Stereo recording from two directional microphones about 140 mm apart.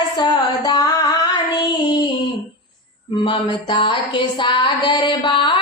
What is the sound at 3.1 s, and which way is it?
Music, 35° left (ahead or behind).